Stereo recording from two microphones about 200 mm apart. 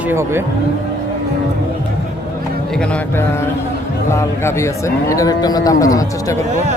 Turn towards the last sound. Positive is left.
turn(degrees=15)  # may be behind; listen again after turning